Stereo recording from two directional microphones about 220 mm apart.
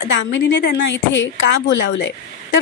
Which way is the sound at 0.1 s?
55° left (ahead or behind).